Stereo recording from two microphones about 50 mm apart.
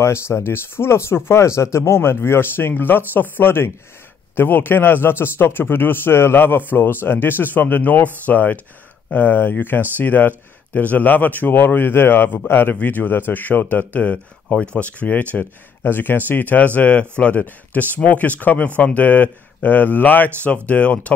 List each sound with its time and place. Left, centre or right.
0.0 s a man's voice: left
12.7 s speech: left
14.0 s speech: left